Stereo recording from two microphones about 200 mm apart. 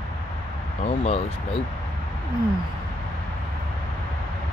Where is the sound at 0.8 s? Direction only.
30° left (ahead or behind).